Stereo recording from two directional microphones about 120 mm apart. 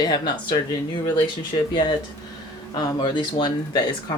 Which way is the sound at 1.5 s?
45° left (ahead or behind).